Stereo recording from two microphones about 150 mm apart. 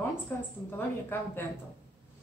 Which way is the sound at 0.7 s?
15° left (ahead or behind).